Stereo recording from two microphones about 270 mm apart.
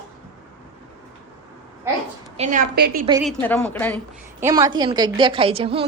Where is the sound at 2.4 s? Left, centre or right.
Right.